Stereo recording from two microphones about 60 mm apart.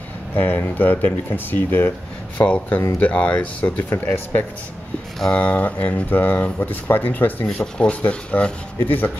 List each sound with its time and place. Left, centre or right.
0.7 s speech: left
2.3 s speech: left
3.9 s speech: left
7.4 s speech: centre
8.7 s speech: left